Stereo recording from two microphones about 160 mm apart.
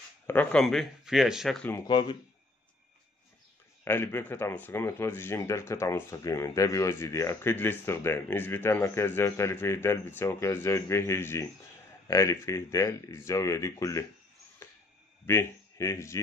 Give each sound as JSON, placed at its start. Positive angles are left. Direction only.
{"t": 0.3, "sound": "speech", "side_deg": 10}
{"t": 1.9, "sound": "speech", "side_deg": 30}
{"t": 3.8, "sound": "speech", "side_deg": 15}
{"t": 14.6, "sound": "a sound", "side_deg": 15}
{"t": 15.2, "sound": "speech", "side_deg": 15}